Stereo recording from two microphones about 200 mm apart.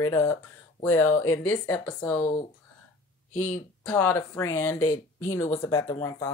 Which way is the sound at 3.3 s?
90° left.